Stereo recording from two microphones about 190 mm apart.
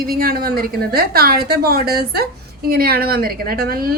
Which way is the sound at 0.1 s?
50° right (ahead or behind).